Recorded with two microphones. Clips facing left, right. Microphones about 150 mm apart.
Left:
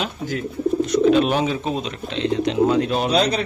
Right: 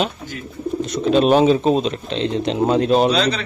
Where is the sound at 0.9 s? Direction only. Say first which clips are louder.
Right 3 dB; 30° right (ahead or behind).